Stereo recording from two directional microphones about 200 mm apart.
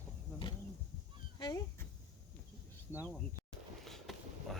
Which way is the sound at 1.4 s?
20° left (ahead or behind).